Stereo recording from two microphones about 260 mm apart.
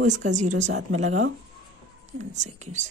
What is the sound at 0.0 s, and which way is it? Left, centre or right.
Speech, right.